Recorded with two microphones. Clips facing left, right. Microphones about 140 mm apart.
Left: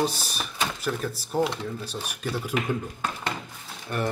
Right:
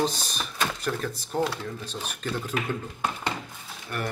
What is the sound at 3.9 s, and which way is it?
Speech, 25° left (ahead or behind).